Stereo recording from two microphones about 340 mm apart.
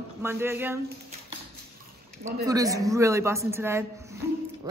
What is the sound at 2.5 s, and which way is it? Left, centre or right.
Speech, centre.